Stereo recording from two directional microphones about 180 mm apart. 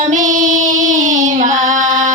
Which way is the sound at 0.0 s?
45° right (ahead or behind).